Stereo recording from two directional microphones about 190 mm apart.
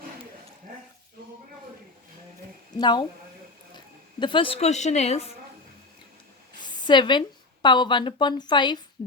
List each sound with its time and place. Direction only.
2.7 s speech: 25° left (ahead or behind)
4.2 s a woman's voice: 25° left (ahead or behind)
6.6 s a woman's voice: 25° left (ahead or behind)